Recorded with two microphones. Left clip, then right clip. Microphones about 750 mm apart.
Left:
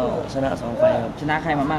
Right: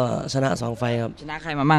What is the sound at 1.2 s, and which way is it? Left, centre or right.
Speech, right.